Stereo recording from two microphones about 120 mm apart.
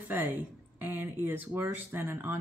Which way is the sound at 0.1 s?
15° right (ahead or behind).